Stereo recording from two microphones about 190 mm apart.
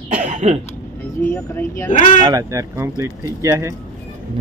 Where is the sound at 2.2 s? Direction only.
15° right (ahead or behind).